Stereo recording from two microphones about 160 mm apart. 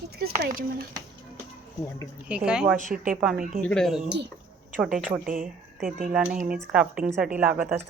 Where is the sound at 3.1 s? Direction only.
5° right (ahead or behind).